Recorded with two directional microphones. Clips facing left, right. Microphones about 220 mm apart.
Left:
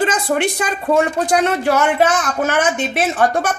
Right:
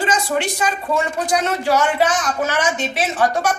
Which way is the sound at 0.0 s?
55° left (ahead or behind).